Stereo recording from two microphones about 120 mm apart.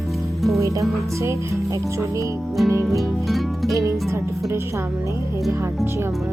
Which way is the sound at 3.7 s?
25° right (ahead or behind).